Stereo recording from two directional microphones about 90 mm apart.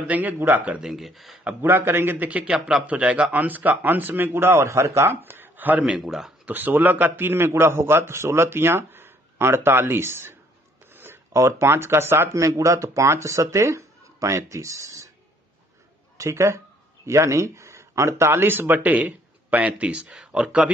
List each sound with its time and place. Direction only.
0.0 s speech: 15° right (ahead or behind); by 1.4 s centre (ahead or behind)
1.6 s a man's voice: 25° right (ahead or behind)
5.9 s speech: 5° right (ahead or behind)
6.4 s a man's voice: 20° right (ahead or behind); by 15.0 s 35° right (ahead or behind)
16.2 s speech: 30° right (ahead or behind); by 20.7 s 10° right (ahead or behind)